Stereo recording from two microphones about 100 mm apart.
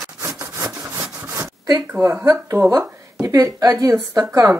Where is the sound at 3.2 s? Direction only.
35° right (ahead or behind).